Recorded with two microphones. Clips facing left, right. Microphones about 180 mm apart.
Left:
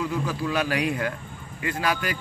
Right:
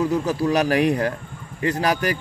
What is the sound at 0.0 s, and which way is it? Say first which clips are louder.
Speech: right 6 dB; 40° right (ahead or behind).